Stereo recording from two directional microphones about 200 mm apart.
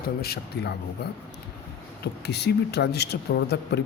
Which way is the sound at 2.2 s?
55° left (ahead or behind).